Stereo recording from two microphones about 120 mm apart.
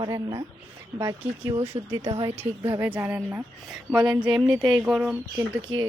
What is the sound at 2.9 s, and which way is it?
A woman's voice, 15° right (ahead or behind).